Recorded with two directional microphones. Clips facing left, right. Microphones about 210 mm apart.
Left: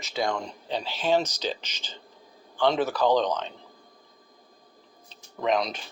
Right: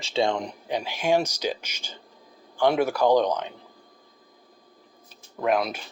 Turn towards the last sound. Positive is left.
turn(degrees=-5)  # may be behind; listen again after turning